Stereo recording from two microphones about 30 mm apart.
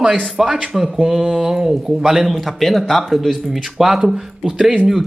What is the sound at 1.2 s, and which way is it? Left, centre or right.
Speech, right.